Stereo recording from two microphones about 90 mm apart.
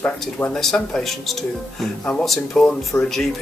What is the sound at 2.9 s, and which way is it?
Speech, 20° left (ahead or behind).